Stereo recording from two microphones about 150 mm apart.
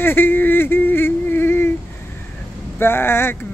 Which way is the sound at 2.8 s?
15° left (ahead or behind).